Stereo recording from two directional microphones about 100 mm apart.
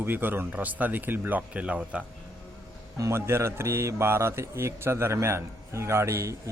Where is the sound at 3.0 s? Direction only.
25° right (ahead or behind).